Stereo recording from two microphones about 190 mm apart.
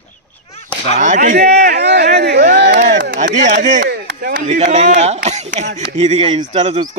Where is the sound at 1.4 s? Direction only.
60° right (ahead or behind).